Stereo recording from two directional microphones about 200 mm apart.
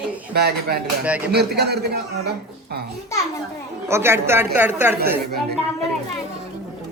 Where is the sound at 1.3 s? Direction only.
55° right (ahead or behind).